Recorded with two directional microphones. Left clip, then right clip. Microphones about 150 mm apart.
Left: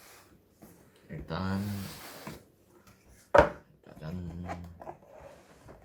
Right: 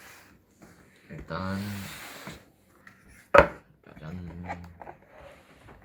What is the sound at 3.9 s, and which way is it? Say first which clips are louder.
Dog: even; 10° left (ahead or behind).